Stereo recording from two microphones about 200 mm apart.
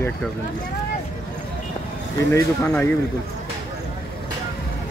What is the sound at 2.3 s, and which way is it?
Speech, 10° left (ahead or behind).